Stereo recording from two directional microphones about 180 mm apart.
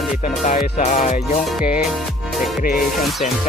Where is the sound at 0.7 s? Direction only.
40° left (ahead or behind).